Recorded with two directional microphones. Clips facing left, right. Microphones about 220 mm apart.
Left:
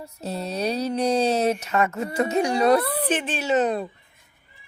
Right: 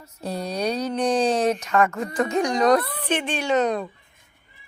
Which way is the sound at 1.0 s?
25° left (ahead or behind).